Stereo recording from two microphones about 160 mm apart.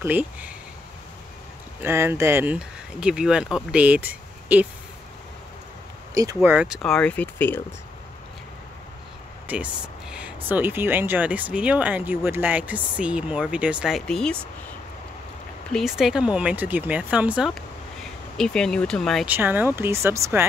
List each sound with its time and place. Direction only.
0.0 s speech: 10° right (ahead or behind)
1.8 s speech: 15° right (ahead or behind)
6.1 s speech: 20° right (ahead or behind)
6.5 s speech: 5° right (ahead or behind); by 7.6 s 10° left (ahead or behind)
9.5 s speech: 5° right (ahead or behind)
15.7 s speech: centre (ahead or behind)
19.2 s speech: 10° right (ahead or behind)